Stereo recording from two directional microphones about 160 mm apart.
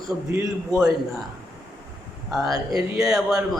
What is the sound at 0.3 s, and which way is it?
Speech, 15° right (ahead or behind).